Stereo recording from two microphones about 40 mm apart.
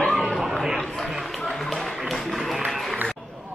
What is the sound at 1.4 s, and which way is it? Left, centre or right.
Music, centre.